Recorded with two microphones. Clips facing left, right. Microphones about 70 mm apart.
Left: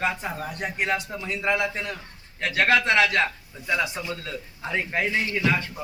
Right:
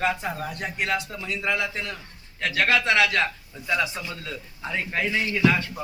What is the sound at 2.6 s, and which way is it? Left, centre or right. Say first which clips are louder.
Speech: left 1 dB; left.